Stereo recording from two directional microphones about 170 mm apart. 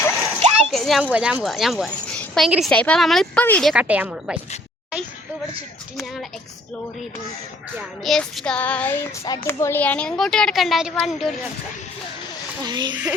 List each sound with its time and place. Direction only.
0.3 s splash: 35° right (ahead or behind)
0.7 s a woman's voice: centre (ahead or behind)
7.8 s speech: centre (ahead or behind)
12.6 s speech: 25° right (ahead or behind)